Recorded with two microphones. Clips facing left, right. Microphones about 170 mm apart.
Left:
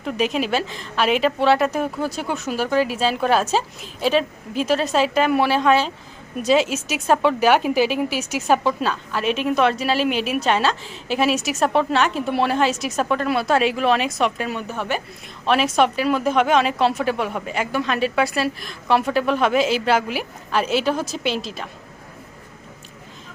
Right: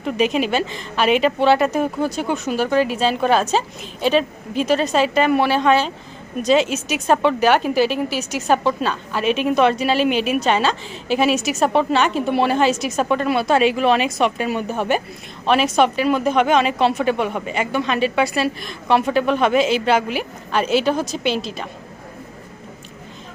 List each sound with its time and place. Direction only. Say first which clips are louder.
0.0 s a woman's voice: right 3 dB; centre (ahead or behind)
14.5 s speech: right 5 dB; 15° right (ahead or behind)
15.4 s a woman's voice: right 2 dB; centre (ahead or behind)